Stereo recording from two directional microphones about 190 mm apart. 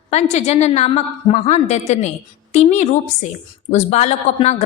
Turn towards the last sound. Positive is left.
turn(degrees=35)  # may be behind; listen again after turning